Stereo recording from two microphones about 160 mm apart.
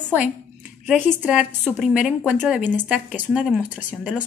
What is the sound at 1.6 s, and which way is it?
A woman's voice, centre (ahead or behind).